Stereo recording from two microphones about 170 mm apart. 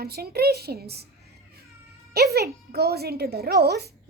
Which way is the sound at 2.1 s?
70° right (ahead or behind).